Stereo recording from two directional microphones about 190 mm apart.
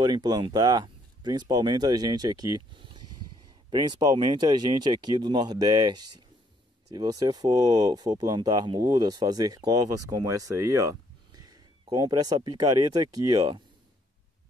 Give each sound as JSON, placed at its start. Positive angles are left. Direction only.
{"t": 0.0, "sound": "speech", "side_deg": -20}